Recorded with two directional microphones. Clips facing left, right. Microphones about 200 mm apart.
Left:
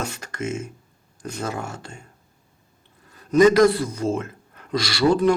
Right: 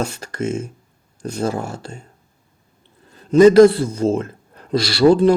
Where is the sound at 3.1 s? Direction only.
30° right (ahead or behind).